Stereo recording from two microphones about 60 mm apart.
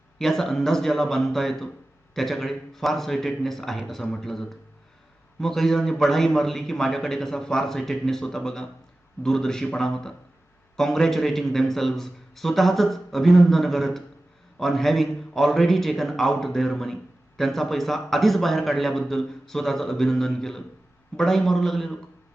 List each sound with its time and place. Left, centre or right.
0.2 s a man's voice: centre